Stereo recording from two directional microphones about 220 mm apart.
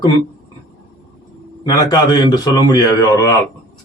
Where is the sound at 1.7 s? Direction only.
20° left (ahead or behind).